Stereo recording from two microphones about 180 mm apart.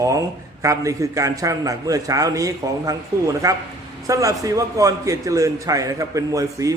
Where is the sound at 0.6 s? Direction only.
15° right (ahead or behind).